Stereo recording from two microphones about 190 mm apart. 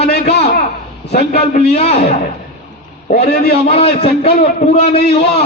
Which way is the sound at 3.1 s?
60° left (ahead or behind).